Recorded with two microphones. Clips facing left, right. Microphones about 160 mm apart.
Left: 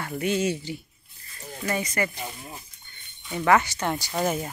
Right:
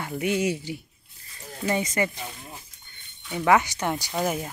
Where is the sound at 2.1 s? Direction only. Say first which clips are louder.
Left 2 dB; 10° left (ahead or behind).